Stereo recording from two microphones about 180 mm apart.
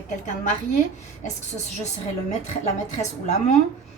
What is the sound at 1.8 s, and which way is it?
A woman's voice, 40° left (ahead or behind).